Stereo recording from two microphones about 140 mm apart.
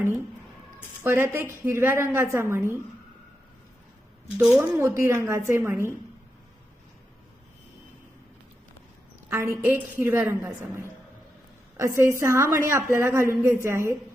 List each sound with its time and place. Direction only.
1.0 s a woman's voice: 15° right (ahead or behind)
4.4 s a woman's voice: 5° right (ahead or behind)
4.8 s a woman's voice: 20° right (ahead or behind)
9.3 s a woman's voice: 20° right (ahead or behind)
11.9 s a woman's voice: 20° right (ahead or behind)